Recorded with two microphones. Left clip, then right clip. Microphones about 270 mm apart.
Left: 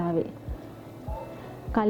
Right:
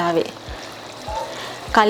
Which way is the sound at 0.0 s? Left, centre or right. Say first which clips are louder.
Right 9 dB; centre.